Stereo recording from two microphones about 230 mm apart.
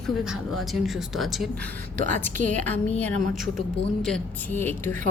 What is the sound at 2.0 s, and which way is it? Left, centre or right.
Speech, right.